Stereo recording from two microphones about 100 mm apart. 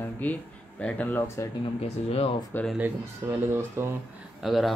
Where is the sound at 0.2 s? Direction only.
15° left (ahead or behind).